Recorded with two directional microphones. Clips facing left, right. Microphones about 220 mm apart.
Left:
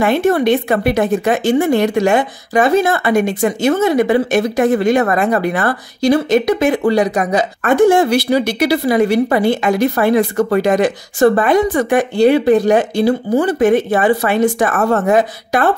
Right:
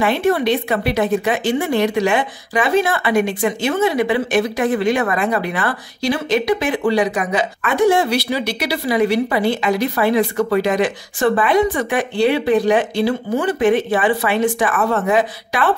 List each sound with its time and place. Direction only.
0.0 s speech: 45° left (ahead or behind)